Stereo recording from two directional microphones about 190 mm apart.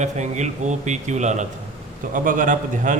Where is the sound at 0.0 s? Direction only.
40° right (ahead or behind).